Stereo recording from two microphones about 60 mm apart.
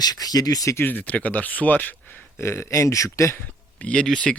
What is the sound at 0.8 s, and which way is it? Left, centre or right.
Speech, left.